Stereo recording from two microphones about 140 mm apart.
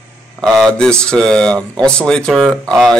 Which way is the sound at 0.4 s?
5° left (ahead or behind).